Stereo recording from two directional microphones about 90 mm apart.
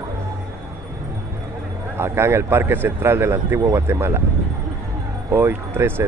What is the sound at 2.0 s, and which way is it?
Speech, 30° right (ahead or behind).